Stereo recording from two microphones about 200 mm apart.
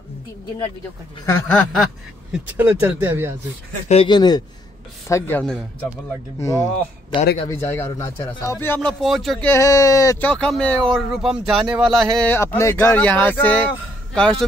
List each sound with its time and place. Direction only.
1.5 s speech: 5° left (ahead or behind)
2.3 s speech: 10° right (ahead or behind)
3.9 s speech: 25° left (ahead or behind); by 9.5 s centre (ahead or behind)
9.5 s speech: 15° left (ahead or behind)
10.3 s speech: 5° left (ahead or behind)